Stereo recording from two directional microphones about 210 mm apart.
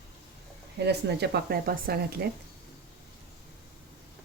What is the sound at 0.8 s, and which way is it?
Speech, 50° right (ahead or behind).